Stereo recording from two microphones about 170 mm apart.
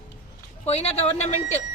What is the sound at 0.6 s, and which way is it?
Speech, 40° left (ahead or behind).